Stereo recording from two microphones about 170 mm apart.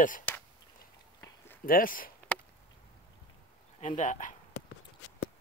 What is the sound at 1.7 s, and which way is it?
Speech, 55° left (ahead or behind).